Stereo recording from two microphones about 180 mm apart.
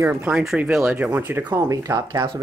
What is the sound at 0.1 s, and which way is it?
Speech, 5° right (ahead or behind).